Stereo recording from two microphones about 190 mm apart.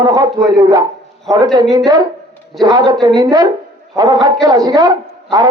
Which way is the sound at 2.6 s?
20° right (ahead or behind).